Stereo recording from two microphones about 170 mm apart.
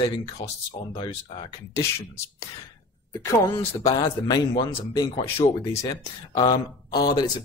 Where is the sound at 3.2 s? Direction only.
20° left (ahead or behind).